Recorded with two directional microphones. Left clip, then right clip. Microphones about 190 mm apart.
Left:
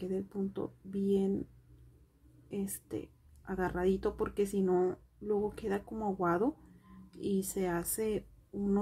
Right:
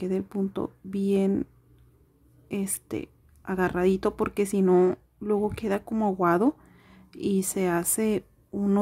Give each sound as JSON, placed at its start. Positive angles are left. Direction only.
{"t": 0.0, "sound": "speech", "side_deg": -40}
{"t": 2.4, "sound": "speech", "side_deg": -40}